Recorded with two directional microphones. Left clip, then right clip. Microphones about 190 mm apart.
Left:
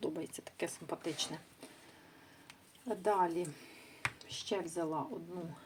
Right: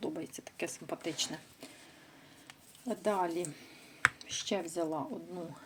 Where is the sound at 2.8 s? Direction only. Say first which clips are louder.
Even; 15° right (ahead or behind).